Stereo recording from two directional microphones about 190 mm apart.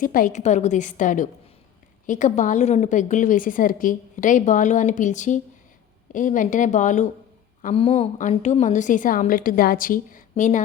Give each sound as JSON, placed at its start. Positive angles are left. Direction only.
{"t": 0.0, "sound": "a woman's voice", "side_deg": 45}
{"t": 7.7, "sound": "a woman's voice", "side_deg": 30}